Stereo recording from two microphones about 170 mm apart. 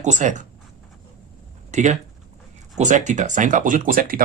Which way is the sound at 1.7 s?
45° right (ahead or behind).